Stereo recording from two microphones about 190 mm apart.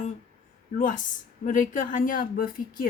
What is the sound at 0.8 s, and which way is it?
A woman's voice, 40° left (ahead or behind).